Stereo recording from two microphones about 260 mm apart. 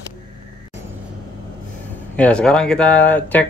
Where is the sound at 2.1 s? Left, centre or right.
Centre.